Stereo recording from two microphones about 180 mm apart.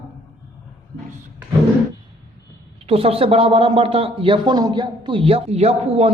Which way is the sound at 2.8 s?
30° right (ahead or behind).